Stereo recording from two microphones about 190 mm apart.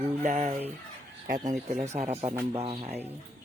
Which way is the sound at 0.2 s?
40° right (ahead or behind).